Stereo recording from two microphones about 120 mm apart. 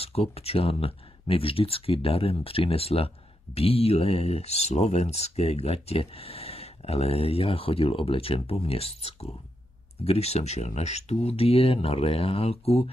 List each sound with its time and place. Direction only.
0.0 s speech: 55° left (ahead or behind)